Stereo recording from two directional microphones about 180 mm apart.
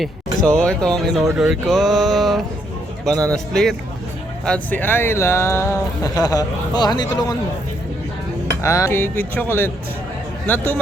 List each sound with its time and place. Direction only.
0.0 s speech: 5° left (ahead or behind); by 7.3 s 20° left (ahead or behind)
8.4 s music: 15° left (ahead or behind)
9.3 s speech: 10° left (ahead or behind)